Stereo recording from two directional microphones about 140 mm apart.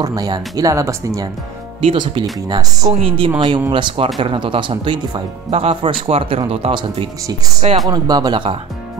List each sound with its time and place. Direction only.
0.0 s speech: 25° right (ahead or behind)
1.8 s speech: 40° right (ahead or behind)
2.4 s speech: 25° right (ahead or behind)
2.9 s speech: 40° right (ahead or behind)
3.3 s speech: 30° right (ahead or behind)
5.5 s speech: 45° right (ahead or behind)